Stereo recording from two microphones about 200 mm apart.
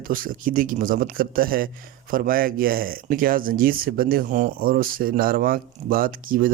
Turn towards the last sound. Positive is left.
turn(degrees=-45)  # may be behind; listen again after turning